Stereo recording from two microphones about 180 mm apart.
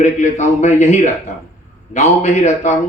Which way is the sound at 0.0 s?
40° left (ahead or behind).